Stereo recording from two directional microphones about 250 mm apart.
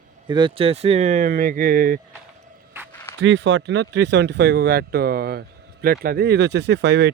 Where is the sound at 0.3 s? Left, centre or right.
Centre; by 2.0 s right.